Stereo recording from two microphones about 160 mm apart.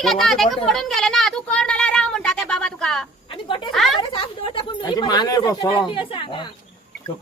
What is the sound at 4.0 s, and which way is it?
Speech, 30° left (ahead or behind).